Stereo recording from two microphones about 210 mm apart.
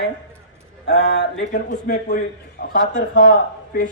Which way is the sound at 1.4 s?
40° left (ahead or behind).